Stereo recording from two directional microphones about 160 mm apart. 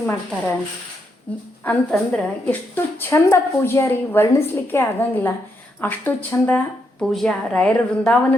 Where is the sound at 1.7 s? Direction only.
10° left (ahead or behind).